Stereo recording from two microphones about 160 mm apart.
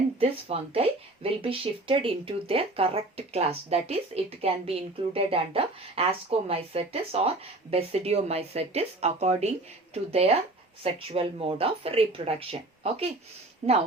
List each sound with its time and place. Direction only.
0.2 s speech: 40° right (ahead or behind)